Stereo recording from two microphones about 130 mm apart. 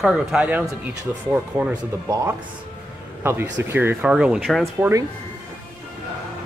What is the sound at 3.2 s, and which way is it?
Speech, 20° right (ahead or behind).